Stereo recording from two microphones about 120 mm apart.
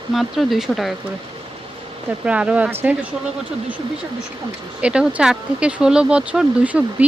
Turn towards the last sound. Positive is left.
turn(degrees=-10)  # may be behind; listen again after turning